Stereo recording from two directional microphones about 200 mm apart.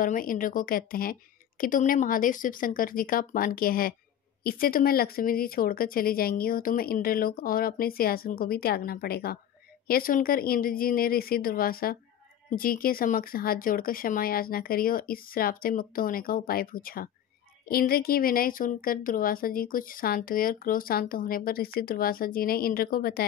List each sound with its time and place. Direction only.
0.0 s speech: 45° left (ahead or behind)